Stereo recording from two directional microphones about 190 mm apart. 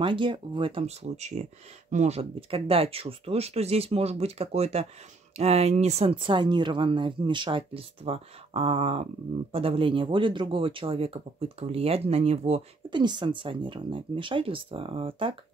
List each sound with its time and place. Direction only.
0.0 s speech: 25° right (ahead or behind)